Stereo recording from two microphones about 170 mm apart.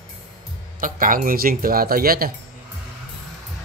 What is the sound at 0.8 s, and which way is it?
Speech, 55° right (ahead or behind).